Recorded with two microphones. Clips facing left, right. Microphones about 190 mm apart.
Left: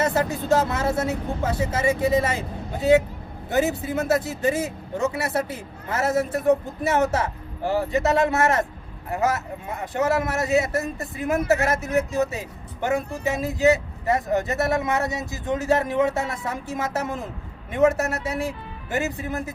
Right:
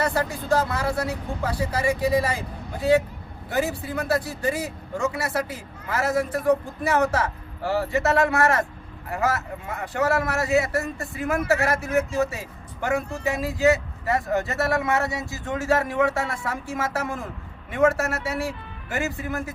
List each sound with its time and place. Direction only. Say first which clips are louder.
0.0 s speech: left 2 dB; 20° left (ahead or behind)